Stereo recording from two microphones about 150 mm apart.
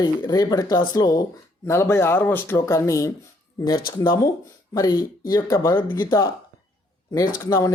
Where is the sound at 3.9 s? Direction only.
30° left (ahead or behind).